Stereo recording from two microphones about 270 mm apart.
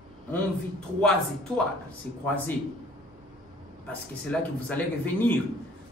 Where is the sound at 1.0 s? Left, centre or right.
Centre.